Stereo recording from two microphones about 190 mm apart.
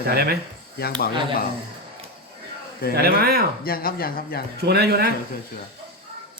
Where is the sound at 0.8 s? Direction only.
50° left (ahead or behind).